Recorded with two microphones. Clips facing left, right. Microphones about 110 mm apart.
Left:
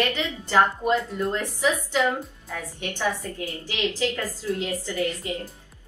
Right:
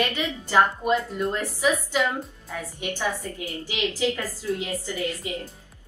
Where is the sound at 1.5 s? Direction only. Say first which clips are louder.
Even; 15° right (ahead or behind).